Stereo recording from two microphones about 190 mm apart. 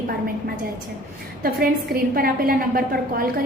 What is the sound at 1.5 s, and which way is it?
A woman's voice, 55° right (ahead or behind).